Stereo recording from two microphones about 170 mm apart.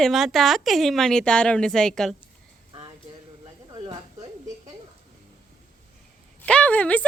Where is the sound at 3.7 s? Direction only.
30° right (ahead or behind).